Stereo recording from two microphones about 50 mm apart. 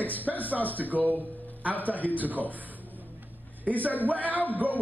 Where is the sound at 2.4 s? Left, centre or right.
Left.